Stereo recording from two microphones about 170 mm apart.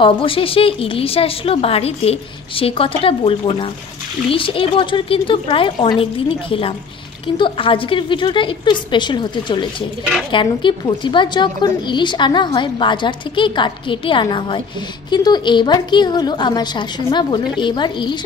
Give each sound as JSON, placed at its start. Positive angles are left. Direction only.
{"t": 0.0, "sound": "a woman's voice", "side_deg": 30}